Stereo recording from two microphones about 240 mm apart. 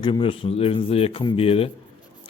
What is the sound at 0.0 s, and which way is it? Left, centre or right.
A man's voice, left.